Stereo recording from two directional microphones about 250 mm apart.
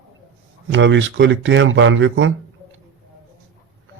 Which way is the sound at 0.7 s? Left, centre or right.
Right.